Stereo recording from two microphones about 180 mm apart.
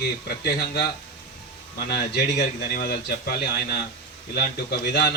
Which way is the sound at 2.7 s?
55° left (ahead or behind).